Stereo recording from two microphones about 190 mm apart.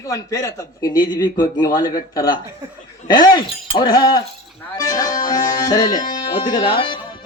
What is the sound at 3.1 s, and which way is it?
Speech, 50° left (ahead or behind).